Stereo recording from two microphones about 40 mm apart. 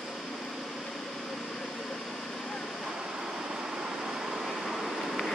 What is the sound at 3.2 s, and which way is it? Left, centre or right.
Vehicle, centre.